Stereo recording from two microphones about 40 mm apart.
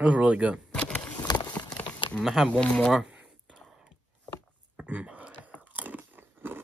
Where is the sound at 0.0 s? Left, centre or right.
Right.